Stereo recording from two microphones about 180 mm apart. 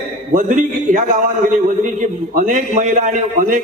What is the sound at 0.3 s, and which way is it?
Speech, 45° right (ahead or behind).